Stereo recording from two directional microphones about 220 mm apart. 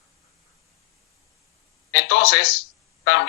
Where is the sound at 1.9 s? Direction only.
50° left (ahead or behind).